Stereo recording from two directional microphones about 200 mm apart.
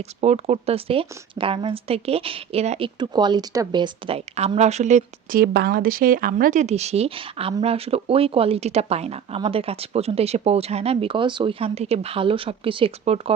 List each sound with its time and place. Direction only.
0.2 s a woman's voice: 30° right (ahead or behind)